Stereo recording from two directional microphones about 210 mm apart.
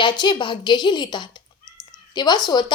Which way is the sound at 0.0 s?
20° left (ahead or behind).